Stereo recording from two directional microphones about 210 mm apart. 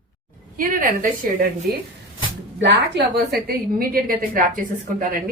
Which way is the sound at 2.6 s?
50° right (ahead or behind).